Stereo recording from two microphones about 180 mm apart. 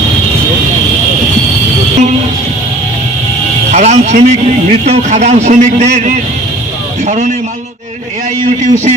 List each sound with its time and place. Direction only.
3.7 s a man's voice: 40° right (ahead or behind)
8.5 s a man's voice: 40° right (ahead or behind)